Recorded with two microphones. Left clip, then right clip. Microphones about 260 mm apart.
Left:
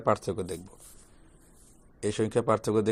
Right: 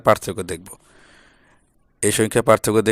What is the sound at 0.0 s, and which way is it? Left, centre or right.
Speech, right.